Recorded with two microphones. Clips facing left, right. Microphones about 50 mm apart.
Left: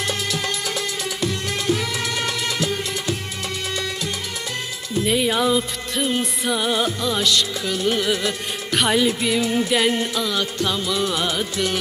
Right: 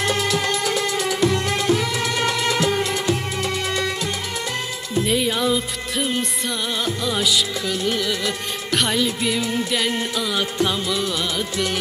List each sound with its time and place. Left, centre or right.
0.0 s music: right
0.9 s music: right
1.7 s music: centre
2.4 s music: right
5.0 s music: centre
7.1 s music: centre
9.9 s music: centre
11.0 s music: centre